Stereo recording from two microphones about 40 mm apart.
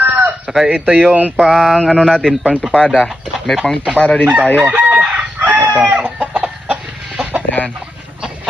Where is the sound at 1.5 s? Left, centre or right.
Centre.